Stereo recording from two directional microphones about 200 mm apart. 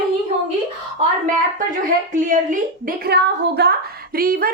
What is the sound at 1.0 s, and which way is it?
A woman's voice, 40° right (ahead or behind).